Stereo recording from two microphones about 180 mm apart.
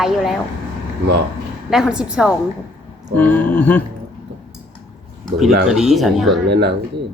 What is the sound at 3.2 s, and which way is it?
Speech, 10° left (ahead or behind).